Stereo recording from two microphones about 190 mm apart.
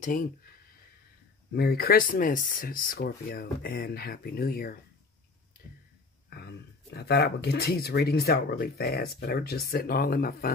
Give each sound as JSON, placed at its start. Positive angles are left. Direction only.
{"t": 0.0, "sound": "speech", "side_deg": 45}
{"t": 1.5, "sound": "speech", "side_deg": 55}
{"t": 6.3, "sound": "speech", "side_deg": 60}